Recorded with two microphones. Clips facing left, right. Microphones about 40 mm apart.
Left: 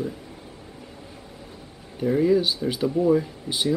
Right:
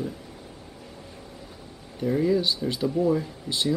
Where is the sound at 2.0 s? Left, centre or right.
Centre.